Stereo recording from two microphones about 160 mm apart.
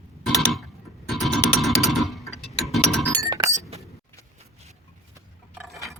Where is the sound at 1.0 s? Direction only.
Centre (ahead or behind).